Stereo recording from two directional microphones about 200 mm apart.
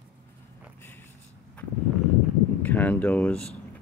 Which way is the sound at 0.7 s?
10° left (ahead or behind).